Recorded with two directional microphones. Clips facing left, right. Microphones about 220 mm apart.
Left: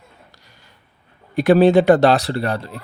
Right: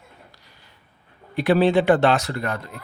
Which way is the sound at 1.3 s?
45° left (ahead or behind).